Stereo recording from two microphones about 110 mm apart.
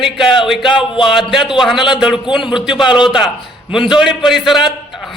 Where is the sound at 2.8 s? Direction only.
45° left (ahead or behind).